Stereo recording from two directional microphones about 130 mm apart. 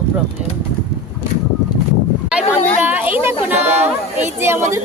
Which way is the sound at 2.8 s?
15° right (ahead or behind).